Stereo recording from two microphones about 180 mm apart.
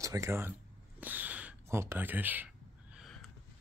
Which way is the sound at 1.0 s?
10° right (ahead or behind).